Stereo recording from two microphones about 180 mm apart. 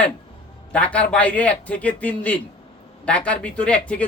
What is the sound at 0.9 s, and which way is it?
Speech, 5° left (ahead or behind).